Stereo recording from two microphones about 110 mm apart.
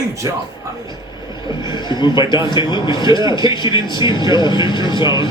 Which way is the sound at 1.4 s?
40° left (ahead or behind).